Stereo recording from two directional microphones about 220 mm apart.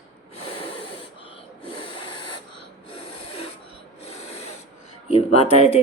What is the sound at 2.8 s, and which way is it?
Rub, 25° left (ahead or behind).